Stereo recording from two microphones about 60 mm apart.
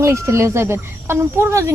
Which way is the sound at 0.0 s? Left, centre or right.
Right.